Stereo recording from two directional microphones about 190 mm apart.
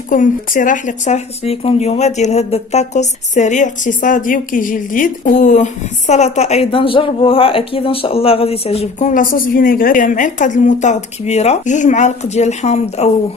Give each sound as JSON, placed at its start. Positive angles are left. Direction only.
{"t": 0.1, "sound": "speech", "side_deg": 45}
{"t": 9.1, "sound": "speech", "side_deg": 45}